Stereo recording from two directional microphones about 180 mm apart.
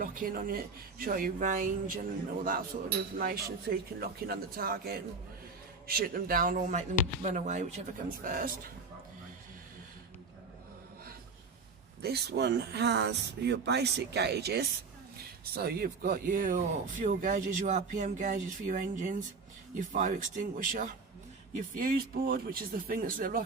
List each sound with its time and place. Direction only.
0.0 s a man's voice: 50° right (ahead or behind)
6.1 s speech: 50° right (ahead or behind)
12.0 s speech: 65° right (ahead or behind); by 23.4 s 50° right (ahead or behind)